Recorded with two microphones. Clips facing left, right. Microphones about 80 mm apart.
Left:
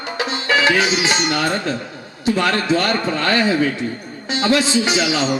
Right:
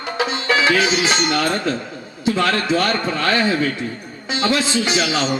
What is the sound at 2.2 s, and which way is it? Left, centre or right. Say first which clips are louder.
A man's voice: left 1 dB; left.